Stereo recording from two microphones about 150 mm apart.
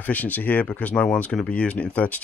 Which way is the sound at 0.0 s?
10° left (ahead or behind).